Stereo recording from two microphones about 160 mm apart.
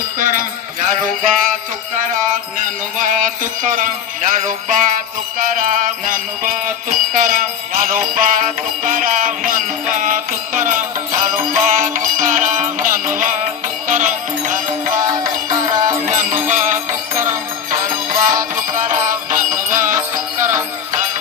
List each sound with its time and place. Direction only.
0.2 s music: 55° right (ahead or behind)
3.0 s music: 55° right (ahead or behind)
5.4 s jingle bell: 55° right (ahead or behind)
11.5 s music: 55° right (ahead or behind)
15.4 s music: 20° right (ahead or behind)
16.0 s music: 50° right (ahead or behind)
18.7 s music: 55° right (ahead or behind)